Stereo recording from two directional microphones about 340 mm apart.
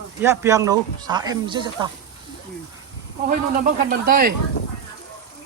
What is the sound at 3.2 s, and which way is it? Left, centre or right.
Speech, right.